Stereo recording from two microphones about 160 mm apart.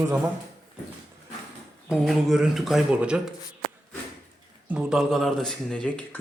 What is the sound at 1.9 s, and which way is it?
Speech, 5° right (ahead or behind).